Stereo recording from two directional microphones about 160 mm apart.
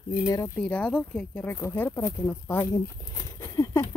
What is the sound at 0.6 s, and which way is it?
Speech, 10° left (ahead or behind).